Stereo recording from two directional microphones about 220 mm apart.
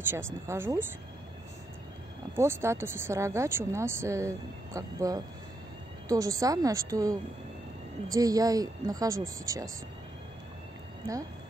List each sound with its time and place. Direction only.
0.1 s speech: 10° right (ahead or behind)
2.3 s speech: 10° right (ahead or behind)